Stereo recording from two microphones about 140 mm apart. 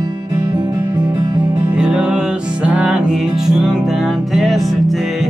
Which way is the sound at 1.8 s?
5° right (ahead or behind).